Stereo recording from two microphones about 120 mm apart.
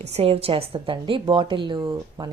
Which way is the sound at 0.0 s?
55° right (ahead or behind).